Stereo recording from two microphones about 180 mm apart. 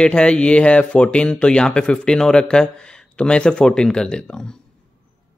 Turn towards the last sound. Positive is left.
turn(degrees=5)  # may be behind; listen again after turning